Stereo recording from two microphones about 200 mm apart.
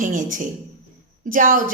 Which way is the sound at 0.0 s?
40° right (ahead or behind).